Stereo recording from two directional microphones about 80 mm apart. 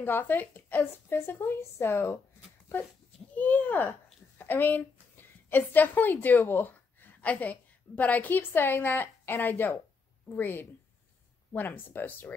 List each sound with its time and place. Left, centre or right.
0.0 s a woman's voice: left
3.3 s speech: left
5.1 s a sound: left
6.2 s a woman's voice: left